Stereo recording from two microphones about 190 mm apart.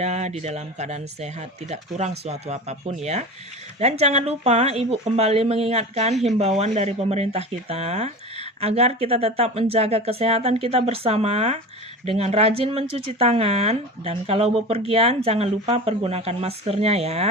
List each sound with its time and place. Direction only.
0.0 s speech: 35° right (ahead or behind)